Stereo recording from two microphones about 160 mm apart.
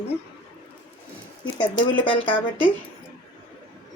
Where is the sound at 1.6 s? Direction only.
30° left (ahead or behind).